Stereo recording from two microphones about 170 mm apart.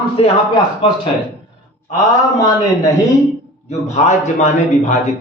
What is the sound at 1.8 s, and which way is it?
Speech, 20° left (ahead or behind).